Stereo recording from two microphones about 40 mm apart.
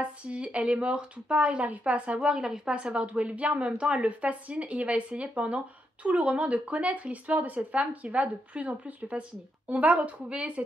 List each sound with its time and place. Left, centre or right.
0.0 s speech: right
2.3 s speech: centre
2.7 s speech: right